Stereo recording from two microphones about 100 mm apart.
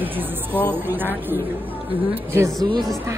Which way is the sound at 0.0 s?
20° right (ahead or behind).